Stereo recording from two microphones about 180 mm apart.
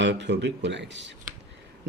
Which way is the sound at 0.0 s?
75° right (ahead or behind).